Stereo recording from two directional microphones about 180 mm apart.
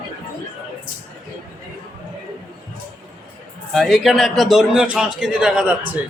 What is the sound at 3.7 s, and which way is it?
A man's voice, centre (ahead or behind).